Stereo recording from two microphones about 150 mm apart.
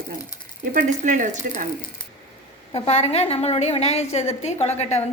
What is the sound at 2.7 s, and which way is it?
A woman's voice, 45° left (ahead or behind).